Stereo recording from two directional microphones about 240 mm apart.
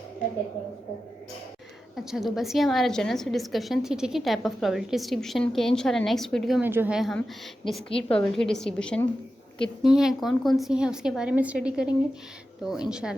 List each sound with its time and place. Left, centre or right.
2.0 s a woman's voice: centre
7.9 s a woman's voice: left
8.1 s a woman's voice: centre